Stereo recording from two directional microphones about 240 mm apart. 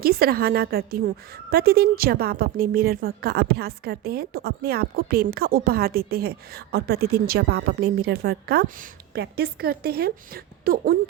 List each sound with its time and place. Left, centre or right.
0.0 s a woman's voice: right